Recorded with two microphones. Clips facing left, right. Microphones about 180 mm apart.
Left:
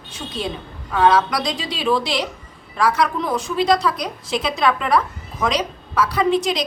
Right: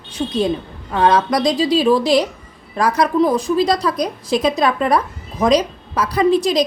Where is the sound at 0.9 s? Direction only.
35° right (ahead or behind).